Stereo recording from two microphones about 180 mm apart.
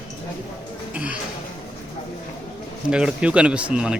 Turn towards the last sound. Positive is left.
turn(degrees=-5)  # may be behind; listen again after turning